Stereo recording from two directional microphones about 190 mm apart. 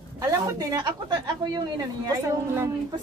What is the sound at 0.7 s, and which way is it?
Speech, 20° right (ahead or behind).